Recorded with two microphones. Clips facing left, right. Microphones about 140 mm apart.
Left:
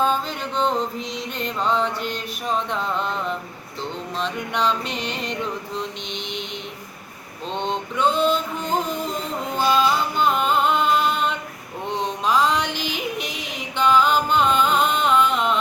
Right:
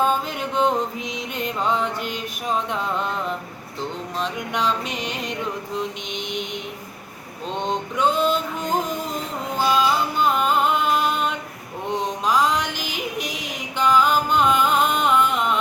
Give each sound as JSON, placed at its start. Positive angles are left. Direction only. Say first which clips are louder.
{"t": 0.0, "sound": "music", "louder": "right 1 dB", "side_deg": -10}
{"t": 2.1, "sound": "mantra", "louder": "even", "side_deg": -5}
{"t": 4.2, "sound": "a sound", "louder": "left 1 dB", "side_deg": -5}
{"t": 7.5, "sound": "male singing", "louder": "even", "side_deg": -5}
{"t": 9.6, "sound": "music", "louder": "even", "side_deg": -5}
{"t": 12.2, "sound": "mantra", "louder": "left 1 dB", "side_deg": -10}
{"t": 12.5, "sound": "yodeling", "louder": "left 1 dB", "side_deg": -45}
{"t": 13.7, "sound": "music", "louder": "even", "side_deg": 0}